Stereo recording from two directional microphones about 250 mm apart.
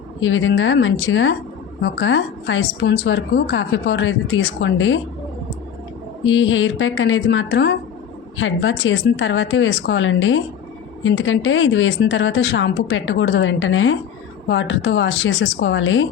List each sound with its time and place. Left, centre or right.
0.2 s a woman's voice: left
6.2 s a woman's voice: left